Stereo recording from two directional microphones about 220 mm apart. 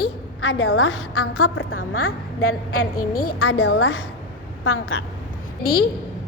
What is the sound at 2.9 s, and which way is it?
Speech, 40° left (ahead or behind).